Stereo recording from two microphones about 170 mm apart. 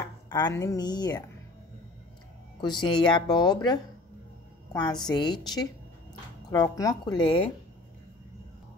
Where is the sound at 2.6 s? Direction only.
25° left (ahead or behind).